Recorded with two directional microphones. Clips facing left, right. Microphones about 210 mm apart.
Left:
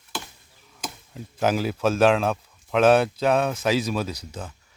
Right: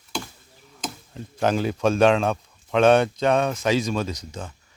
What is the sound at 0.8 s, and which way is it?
Speech, 5° left (ahead or behind).